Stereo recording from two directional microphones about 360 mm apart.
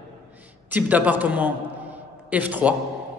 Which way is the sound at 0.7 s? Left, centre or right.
Centre.